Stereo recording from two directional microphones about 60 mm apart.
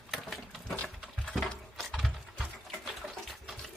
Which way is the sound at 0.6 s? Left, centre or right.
Centre.